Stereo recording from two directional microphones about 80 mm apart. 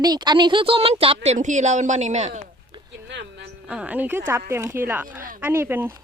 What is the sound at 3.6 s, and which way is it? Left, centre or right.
Speech, centre.